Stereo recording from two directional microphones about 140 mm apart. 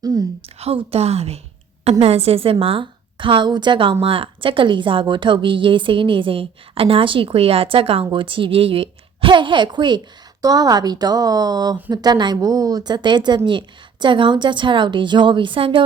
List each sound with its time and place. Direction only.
0.0 s a woman's voice: 25° right (ahead or behind)
0.4 s a woman's voice: 45° right (ahead or behind)